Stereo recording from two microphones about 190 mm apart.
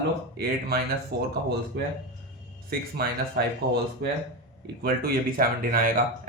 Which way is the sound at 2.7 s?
55° right (ahead or behind).